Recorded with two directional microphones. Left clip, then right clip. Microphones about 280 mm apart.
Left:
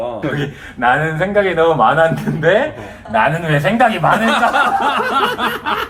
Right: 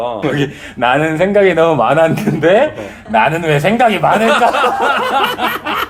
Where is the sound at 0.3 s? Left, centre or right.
Right.